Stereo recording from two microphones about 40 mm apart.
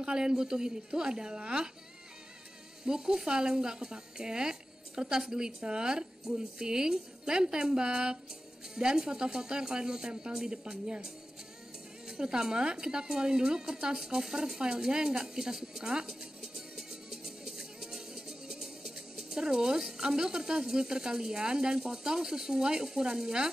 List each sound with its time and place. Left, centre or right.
0.0 s speech: centre
2.8 s speech: centre
12.1 s a woman's voice: centre